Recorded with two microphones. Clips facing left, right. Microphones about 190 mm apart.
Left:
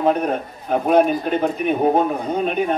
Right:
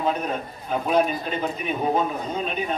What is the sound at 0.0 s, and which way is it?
A man's voice, 55° left (ahead or behind).